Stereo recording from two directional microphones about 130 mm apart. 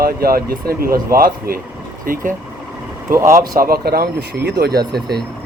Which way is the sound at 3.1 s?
20° right (ahead or behind).